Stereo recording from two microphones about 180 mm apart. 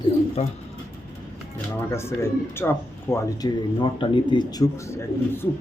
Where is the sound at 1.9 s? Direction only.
15° left (ahead or behind).